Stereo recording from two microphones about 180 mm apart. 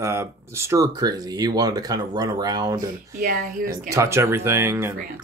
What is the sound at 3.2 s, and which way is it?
Speech, 50° right (ahead or behind).